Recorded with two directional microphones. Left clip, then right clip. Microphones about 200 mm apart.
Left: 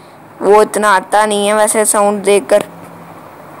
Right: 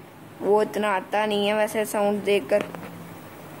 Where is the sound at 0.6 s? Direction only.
5° left (ahead or behind).